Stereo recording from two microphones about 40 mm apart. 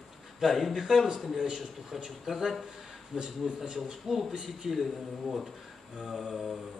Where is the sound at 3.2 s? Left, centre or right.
Centre.